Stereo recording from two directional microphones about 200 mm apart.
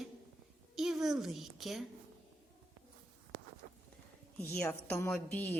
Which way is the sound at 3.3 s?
40° right (ahead or behind).